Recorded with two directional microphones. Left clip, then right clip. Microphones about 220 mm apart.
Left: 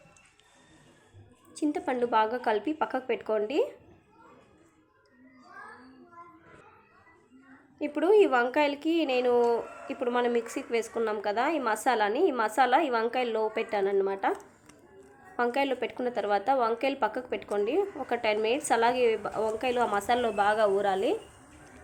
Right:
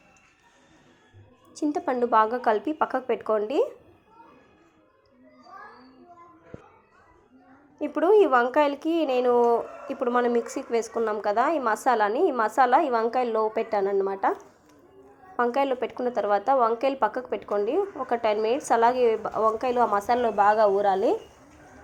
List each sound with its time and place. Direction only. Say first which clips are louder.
1.5 s a woman's voice: right 3 dB; 5° right (ahead or behind)
7.8 s a woman's voice: right 3 dB; 5° right (ahead or behind)
15.4 s a woman's voice: right 4 dB; centre (ahead or behind)
20.0 s a woman's voice: right 4 dB; 15° left (ahead or behind)
20.7 s a woman's voice: right 5 dB; 5° right (ahead or behind)